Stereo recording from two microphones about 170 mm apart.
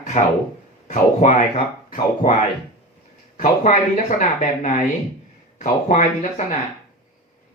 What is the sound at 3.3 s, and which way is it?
Speech, 50° left (ahead or behind).